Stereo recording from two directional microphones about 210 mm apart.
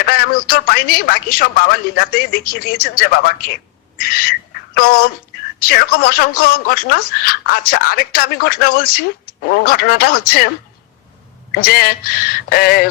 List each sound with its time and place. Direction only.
0.0 s speech: 45° left (ahead or behind)
11.5 s speech: 45° left (ahead or behind)